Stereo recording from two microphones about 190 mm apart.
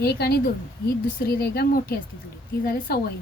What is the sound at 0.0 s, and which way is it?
A woman's voice, 55° left (ahead or behind).